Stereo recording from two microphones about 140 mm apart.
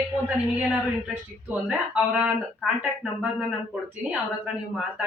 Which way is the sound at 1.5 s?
5° right (ahead or behind).